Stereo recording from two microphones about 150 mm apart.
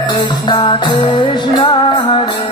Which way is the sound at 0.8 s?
30° left (ahead or behind).